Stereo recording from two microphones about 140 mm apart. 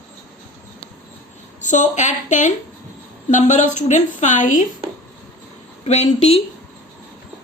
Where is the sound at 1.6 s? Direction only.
60° left (ahead or behind).